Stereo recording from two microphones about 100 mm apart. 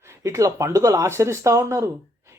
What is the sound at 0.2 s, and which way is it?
Speech, 30° right (ahead or behind).